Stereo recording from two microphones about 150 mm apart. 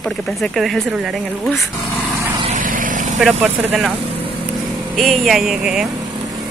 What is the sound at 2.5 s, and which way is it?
Vehicle, 65° right (ahead or behind).